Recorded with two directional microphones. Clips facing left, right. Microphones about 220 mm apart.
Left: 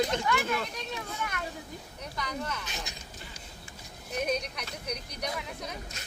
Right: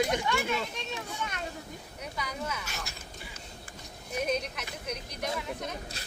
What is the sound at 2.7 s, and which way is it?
Speech, 20° left (ahead or behind).